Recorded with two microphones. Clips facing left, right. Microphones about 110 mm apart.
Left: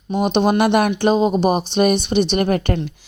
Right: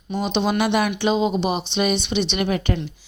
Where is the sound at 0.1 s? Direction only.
50° left (ahead or behind).